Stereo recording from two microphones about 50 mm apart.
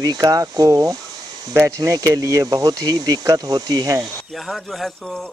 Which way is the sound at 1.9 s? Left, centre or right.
Right.